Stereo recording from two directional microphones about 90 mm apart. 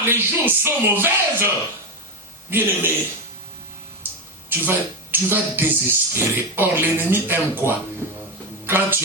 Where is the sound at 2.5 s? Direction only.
25° right (ahead or behind).